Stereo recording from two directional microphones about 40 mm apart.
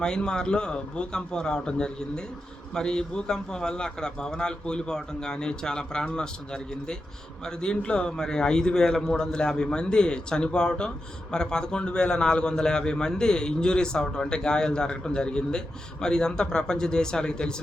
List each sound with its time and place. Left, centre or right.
0.0 s a man's voice: centre